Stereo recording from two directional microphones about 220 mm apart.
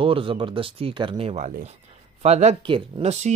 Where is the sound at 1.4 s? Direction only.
35° right (ahead or behind).